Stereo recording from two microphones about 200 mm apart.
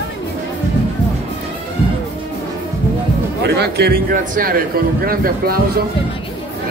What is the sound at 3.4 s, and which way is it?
A man's voice, 55° right (ahead or behind).